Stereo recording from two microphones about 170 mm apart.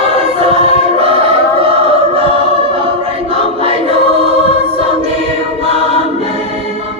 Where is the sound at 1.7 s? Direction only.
35° right (ahead or behind).